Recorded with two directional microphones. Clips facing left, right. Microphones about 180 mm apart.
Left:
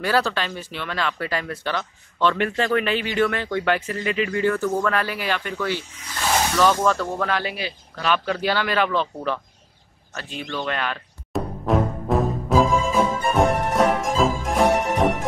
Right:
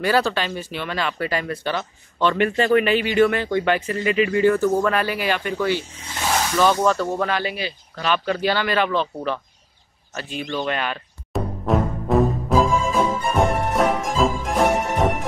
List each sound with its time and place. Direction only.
0.0 s speech: centre (ahead or behind)
5.9 s speech: 25° right (ahead or behind)
6.8 s speech: 10° right (ahead or behind)
10.1 s music: 10° right (ahead or behind)